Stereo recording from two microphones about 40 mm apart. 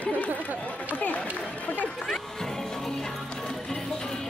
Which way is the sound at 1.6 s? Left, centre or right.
Left.